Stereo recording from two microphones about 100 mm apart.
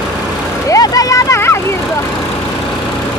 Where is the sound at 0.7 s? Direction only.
35° left (ahead or behind).